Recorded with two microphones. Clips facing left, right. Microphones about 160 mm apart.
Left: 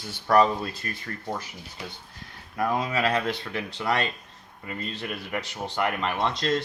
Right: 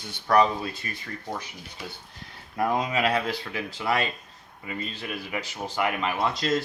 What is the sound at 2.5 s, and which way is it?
Speech, 20° right (ahead or behind).